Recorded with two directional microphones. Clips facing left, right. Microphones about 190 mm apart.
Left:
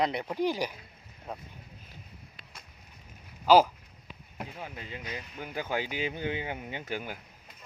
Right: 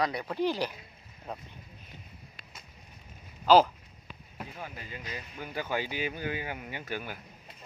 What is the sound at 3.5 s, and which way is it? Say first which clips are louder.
Speech: even; 10° left (ahead or behind).